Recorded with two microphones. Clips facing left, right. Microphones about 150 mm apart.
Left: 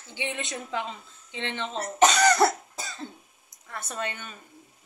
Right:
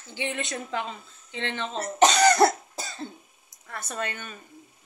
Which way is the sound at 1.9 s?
30° right (ahead or behind).